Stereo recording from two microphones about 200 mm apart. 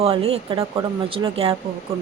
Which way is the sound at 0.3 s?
25° right (ahead or behind).